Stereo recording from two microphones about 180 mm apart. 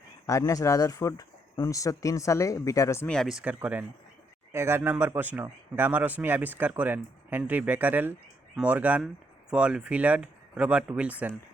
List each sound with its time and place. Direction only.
0.3 s speech: 15° left (ahead or behind); by 11.3 s 10° right (ahead or behind)